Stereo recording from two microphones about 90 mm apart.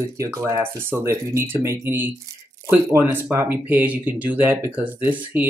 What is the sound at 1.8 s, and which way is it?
Speech, 25° right (ahead or behind).